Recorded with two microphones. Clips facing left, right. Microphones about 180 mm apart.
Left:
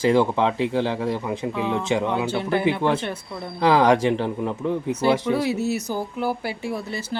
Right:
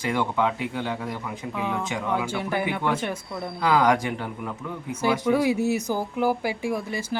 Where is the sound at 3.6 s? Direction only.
30° left (ahead or behind).